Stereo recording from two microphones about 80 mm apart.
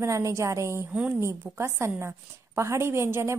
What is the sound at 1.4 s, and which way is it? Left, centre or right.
A woman's voice, right.